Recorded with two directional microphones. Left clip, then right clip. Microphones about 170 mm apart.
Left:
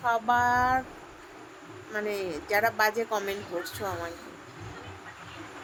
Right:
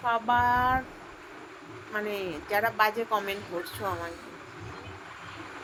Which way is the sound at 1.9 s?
25° left (ahead or behind).